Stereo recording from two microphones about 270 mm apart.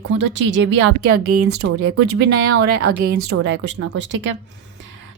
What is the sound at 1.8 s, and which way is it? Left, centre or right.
Speech, right.